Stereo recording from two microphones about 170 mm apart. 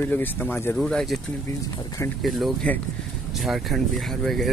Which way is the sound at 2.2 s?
Centre (ahead or behind).